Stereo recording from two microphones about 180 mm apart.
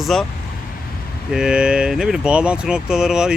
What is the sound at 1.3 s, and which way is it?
Speech, 5° right (ahead or behind).